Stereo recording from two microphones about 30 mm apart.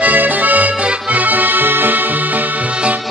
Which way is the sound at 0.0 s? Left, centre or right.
Right.